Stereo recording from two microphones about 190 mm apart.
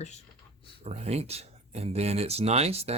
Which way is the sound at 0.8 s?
35° right (ahead or behind).